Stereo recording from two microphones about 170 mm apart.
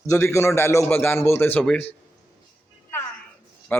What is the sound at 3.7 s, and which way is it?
Speech, 10° left (ahead or behind).